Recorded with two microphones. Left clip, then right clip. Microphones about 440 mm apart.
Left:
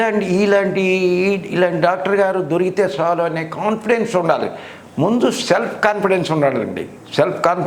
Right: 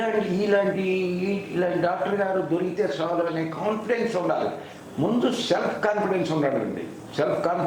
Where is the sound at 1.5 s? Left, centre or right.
Left.